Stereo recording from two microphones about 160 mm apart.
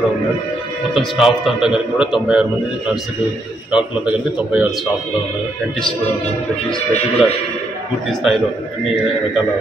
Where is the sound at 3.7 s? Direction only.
5° right (ahead or behind).